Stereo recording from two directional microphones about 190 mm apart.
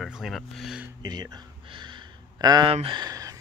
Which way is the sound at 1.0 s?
20° right (ahead or behind).